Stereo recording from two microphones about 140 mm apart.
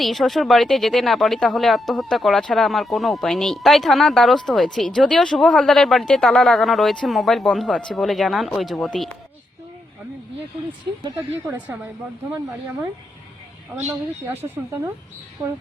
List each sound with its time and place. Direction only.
0.0 s speech: centre (ahead or behind)
11.4 s speech: 10° right (ahead or behind)
14.4 s a woman's voice: 20° right (ahead or behind)